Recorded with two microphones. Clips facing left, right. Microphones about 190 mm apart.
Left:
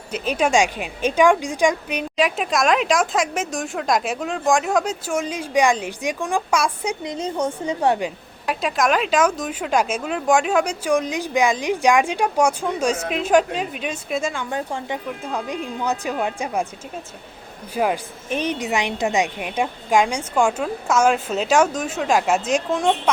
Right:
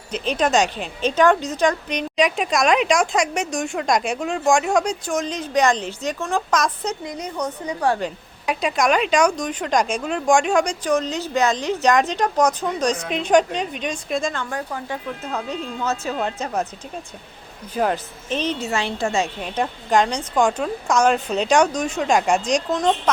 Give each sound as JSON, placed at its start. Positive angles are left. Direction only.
{"t": 0.1, "sound": "a woman's voice", "side_deg": 10}
{"t": 7.0, "sound": "a woman's voice", "side_deg": 25}
{"t": 7.9, "sound": "a woman's voice", "side_deg": 5}
{"t": 14.5, "sound": "a woman's voice", "side_deg": 25}
{"t": 15.2, "sound": "a woman's voice", "side_deg": 10}
{"t": 17.7, "sound": "a woman's voice", "side_deg": 10}